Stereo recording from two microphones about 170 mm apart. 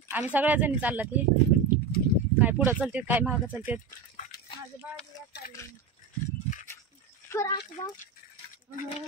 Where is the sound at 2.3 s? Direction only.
10° right (ahead or behind).